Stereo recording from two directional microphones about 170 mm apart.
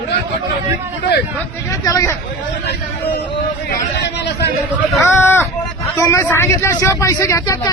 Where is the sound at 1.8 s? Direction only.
20° left (ahead or behind).